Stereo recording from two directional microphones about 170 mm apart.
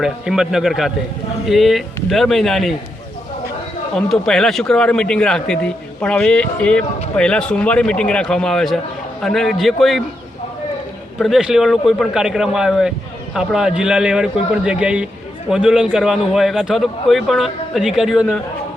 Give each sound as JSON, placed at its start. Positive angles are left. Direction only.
{"t": 0.0, "sound": "speech", "side_deg": -5}
{"t": 3.9, "sound": "speech", "side_deg": 5}
{"t": 11.2, "sound": "speech", "side_deg": 0}